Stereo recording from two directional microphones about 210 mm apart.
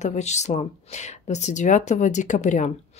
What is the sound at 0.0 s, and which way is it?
A woman's voice, 35° left (ahead or behind).